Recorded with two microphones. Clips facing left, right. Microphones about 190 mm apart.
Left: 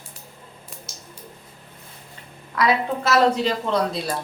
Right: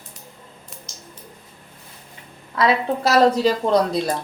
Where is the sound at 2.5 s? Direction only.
30° right (ahead or behind).